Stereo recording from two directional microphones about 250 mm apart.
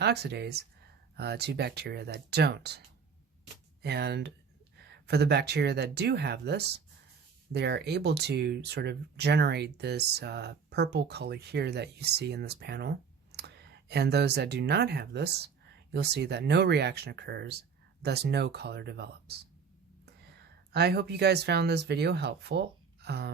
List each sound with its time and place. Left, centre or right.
0.0 s speech: right
3.8 s speech: right